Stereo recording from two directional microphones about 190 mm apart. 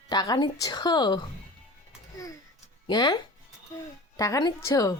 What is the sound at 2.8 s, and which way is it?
Speech, 20° left (ahead or behind).